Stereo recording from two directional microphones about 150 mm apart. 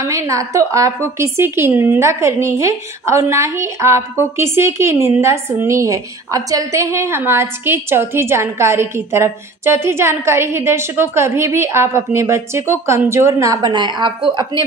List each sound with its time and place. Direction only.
0.0 s a woman's voice: 20° right (ahead or behind)